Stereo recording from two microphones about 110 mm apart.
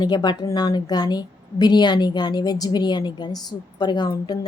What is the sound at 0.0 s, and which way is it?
A woman's voice, 40° left (ahead or behind).